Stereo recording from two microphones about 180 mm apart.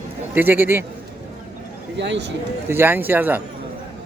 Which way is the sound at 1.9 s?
75° right (ahead or behind).